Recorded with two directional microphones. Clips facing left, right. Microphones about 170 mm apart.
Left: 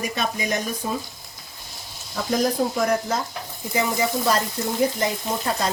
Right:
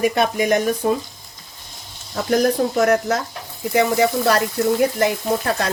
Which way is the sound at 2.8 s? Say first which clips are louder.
Right 7 dB; 75° right (ahead or behind).